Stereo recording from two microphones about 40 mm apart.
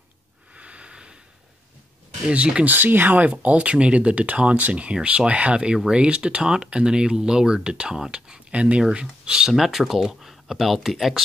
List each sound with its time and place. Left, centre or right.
0.6 s wheeze: right
2.2 s speech: right
2.6 s speech: right
3.4 s speech: right; by 8.4 s centre
8.5 s speech: right
9.2 s speech: right
9.5 s speech: centre